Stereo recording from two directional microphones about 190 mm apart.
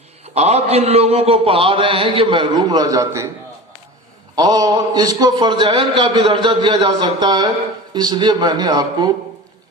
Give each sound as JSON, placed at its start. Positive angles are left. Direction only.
{"t": 0.3, "sound": "mantra", "side_deg": -35}
{"t": 4.4, "sound": "mantra", "side_deg": -20}